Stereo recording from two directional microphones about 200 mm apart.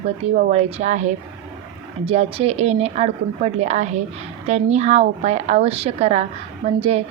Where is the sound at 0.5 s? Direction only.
35° right (ahead or behind).